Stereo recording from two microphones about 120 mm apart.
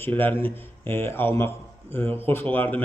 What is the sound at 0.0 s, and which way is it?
A man's voice, 15° left (ahead or behind).